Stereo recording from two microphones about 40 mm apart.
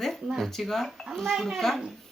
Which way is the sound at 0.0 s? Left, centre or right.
Centre.